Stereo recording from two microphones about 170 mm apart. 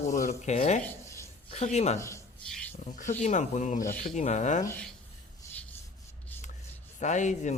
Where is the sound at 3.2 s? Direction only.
45° left (ahead or behind).